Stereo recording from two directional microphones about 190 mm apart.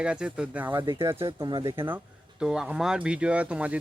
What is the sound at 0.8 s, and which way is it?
Speech, 25° right (ahead or behind).